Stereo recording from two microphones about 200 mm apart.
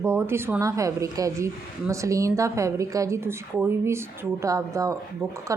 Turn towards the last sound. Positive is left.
turn(degrees=-15)  # may be behind; listen again after turning